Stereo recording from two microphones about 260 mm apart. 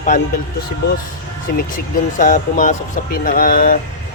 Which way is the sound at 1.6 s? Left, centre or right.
Left.